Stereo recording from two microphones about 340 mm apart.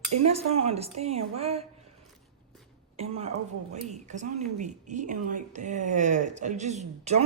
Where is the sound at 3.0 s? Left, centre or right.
Centre.